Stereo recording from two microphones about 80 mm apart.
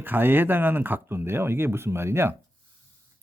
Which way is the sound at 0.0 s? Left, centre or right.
Right.